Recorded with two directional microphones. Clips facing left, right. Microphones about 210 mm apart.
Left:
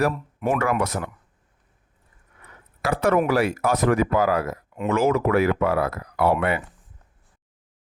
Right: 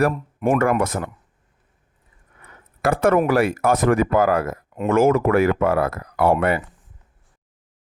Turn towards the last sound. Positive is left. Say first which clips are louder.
# right 3 dB
turn(degrees=-45)  # may be behind; listen again after turning